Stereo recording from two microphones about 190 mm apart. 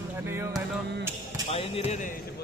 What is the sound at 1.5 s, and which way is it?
Speech, 30° left (ahead or behind).